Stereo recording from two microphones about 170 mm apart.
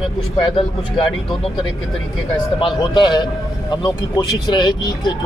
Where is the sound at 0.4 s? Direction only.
30° left (ahead or behind).